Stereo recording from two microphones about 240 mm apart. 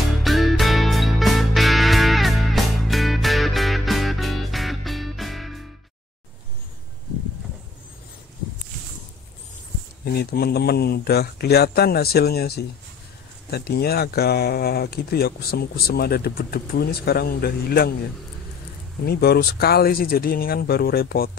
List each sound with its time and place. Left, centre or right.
0.2 s music: centre
10.1 s speech: left
19.0 s speech: left